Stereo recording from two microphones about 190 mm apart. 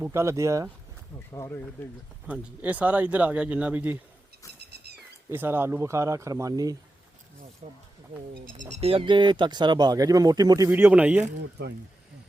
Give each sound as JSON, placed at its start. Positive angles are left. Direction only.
{"t": 0.0, "sound": "speech", "side_deg": -15}
{"t": 1.3, "sound": "speech", "side_deg": 15}
{"t": 2.2, "sound": "speech", "side_deg": -5}
{"t": 5.3, "sound": "speech", "side_deg": -10}
{"t": 7.6, "sound": "speech", "side_deg": -40}
{"t": 10.7, "sound": "speech", "side_deg": -10}